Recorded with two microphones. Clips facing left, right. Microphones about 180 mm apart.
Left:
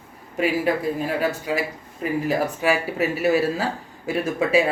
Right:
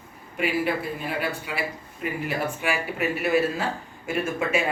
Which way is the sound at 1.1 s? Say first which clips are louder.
Left 6 dB; 40° left (ahead or behind).